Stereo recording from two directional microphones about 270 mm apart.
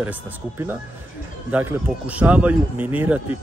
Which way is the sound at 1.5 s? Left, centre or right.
Centre.